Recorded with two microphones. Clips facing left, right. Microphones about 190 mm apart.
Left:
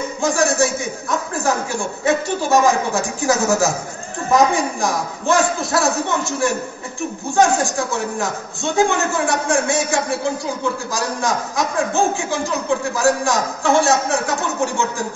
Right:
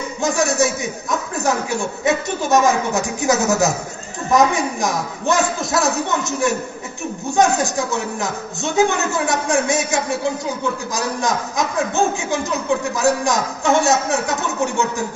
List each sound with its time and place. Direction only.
0.2 s a man's voice: 20° right (ahead or behind)